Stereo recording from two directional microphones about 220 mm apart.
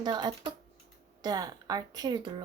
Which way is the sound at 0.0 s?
20° right (ahead or behind).